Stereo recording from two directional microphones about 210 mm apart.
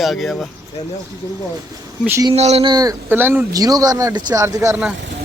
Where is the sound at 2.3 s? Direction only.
30° right (ahead or behind).